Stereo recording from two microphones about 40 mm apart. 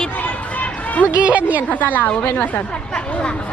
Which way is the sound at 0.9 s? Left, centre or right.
Left.